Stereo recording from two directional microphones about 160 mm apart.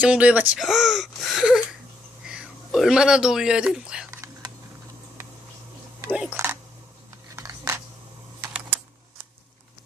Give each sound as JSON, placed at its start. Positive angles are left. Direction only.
{"t": 0.0, "sound": "speech", "side_deg": -5}
{"t": 4.1, "sound": "typing", "side_deg": -20}
{"t": 6.3, "sound": "a sound", "side_deg": -15}
{"t": 8.4, "sound": "typing", "side_deg": -15}